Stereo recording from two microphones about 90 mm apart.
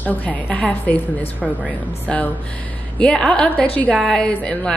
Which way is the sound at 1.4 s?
5° left (ahead or behind).